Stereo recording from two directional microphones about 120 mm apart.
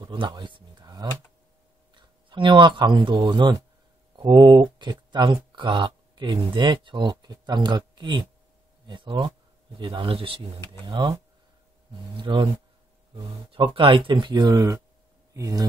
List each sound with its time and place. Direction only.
0.0 s a sound: 40° right (ahead or behind)
2.0 s speech: 40° right (ahead or behind)
10.6 s speech: 35° right (ahead or behind)
12.2 s speech: 40° right (ahead or behind); by 15.6 s 25° right (ahead or behind)